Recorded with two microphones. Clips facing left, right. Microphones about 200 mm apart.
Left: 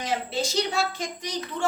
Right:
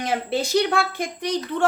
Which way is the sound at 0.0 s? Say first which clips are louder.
Right 4 dB; 60° right (ahead or behind).